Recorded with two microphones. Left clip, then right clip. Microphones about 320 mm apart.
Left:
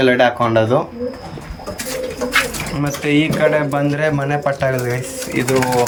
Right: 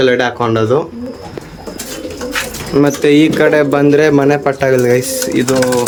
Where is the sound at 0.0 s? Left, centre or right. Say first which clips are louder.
Right 1 dB; centre.